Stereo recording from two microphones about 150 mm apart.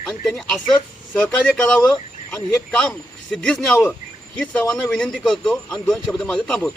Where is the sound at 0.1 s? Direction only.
5° left (ahead or behind).